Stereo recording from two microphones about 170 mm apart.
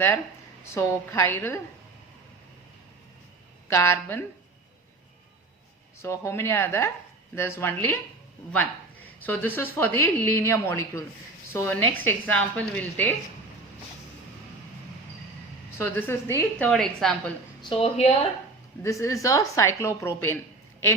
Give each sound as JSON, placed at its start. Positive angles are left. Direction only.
{"t": 0.6, "sound": "speech", "side_deg": 15}
{"t": 3.7, "sound": "speech", "side_deg": 15}
{"t": 6.0, "sound": "speech", "side_deg": 15}
{"t": 9.2, "sound": "speech", "side_deg": 10}
{"t": 15.8, "sound": "speech", "side_deg": 10}
{"t": 16.6, "sound": "a woman's voice", "side_deg": 0}
{"t": 17.6, "sound": "a woman's voice", "side_deg": 35}
{"t": 18.8, "sound": "speech", "side_deg": 20}